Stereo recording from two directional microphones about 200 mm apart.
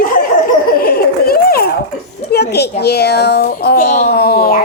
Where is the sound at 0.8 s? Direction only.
50° left (ahead or behind).